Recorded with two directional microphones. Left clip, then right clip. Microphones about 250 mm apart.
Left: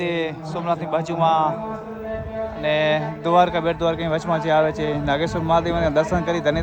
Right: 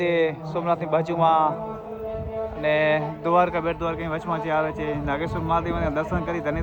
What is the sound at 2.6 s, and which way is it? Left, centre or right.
A man's voice, centre.